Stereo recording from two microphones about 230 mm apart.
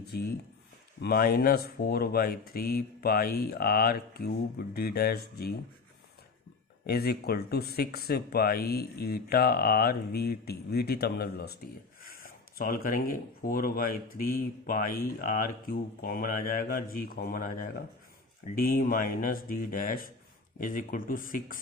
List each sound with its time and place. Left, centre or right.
0.0 s speech: left
6.8 s speech: left